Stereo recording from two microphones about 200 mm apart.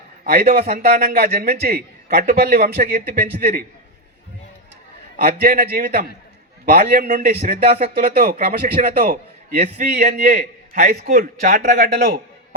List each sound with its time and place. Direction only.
0.3 s a man's voice: 50° right (ahead or behind)
5.1 s a man's voice: 50° right (ahead or behind)
9.6 s a man's voice: 35° right (ahead or behind)